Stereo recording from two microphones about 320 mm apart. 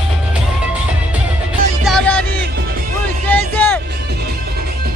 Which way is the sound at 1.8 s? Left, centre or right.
Centre.